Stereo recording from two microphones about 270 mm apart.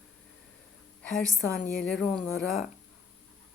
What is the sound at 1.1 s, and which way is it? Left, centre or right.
Speech, centre.